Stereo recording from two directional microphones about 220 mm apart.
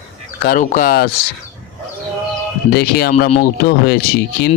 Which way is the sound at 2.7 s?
45° left (ahead or behind).